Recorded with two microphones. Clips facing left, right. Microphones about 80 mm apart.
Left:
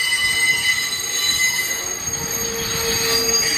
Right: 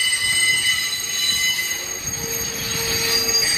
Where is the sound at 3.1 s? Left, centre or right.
Left.